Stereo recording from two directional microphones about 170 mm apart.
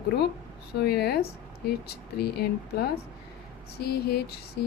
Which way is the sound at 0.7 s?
70° left (ahead or behind).